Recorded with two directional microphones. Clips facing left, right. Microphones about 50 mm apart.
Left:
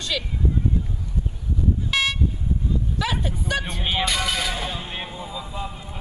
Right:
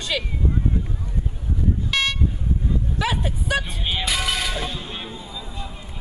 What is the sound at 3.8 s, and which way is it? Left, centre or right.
Music, centre.